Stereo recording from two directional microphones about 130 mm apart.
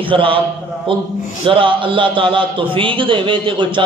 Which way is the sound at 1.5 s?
40° right (ahead or behind).